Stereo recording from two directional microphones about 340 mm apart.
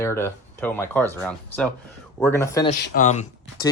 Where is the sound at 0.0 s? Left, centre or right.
Centre.